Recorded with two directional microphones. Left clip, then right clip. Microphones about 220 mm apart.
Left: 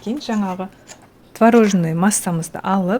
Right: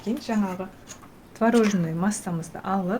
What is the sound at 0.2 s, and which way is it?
A woman's voice, 45° left (ahead or behind).